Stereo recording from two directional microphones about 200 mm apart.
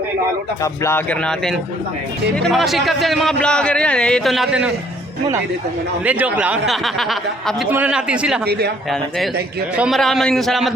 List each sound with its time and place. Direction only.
0.6 s a man's voice: 15° left (ahead or behind); by 4.7 s 5° right (ahead or behind)
6.1 s a man's voice: 5° right (ahead or behind)
8.4 s a man's voice: 55° right (ahead or behind)
8.9 s a man's voice: centre (ahead or behind)